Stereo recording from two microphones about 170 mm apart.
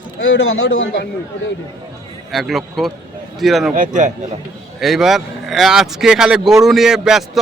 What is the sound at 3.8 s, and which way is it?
Speech, 45° right (ahead or behind).